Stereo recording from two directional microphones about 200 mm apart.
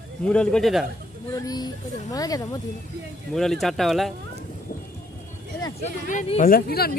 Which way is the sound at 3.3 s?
Centre (ahead or behind).